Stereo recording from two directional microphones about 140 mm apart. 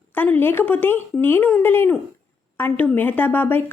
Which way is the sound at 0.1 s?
15° left (ahead or behind).